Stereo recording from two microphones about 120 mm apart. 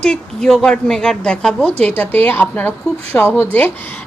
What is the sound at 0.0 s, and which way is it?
A woman's voice, 5° left (ahead or behind).